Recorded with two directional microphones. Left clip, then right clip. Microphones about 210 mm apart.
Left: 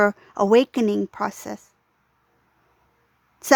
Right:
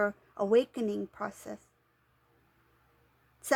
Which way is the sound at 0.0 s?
40° left (ahead or behind).